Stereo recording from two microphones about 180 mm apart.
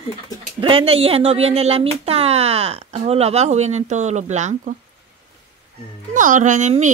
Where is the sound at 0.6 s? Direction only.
30° right (ahead or behind).